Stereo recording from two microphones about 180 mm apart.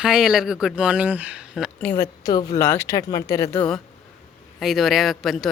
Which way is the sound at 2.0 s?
20° left (ahead or behind).